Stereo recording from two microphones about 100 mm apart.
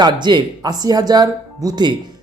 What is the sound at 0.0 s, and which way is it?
Speech, 50° right (ahead or behind).